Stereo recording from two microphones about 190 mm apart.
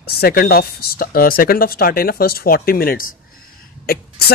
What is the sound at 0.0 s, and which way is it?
Speech, 55° left (ahead or behind).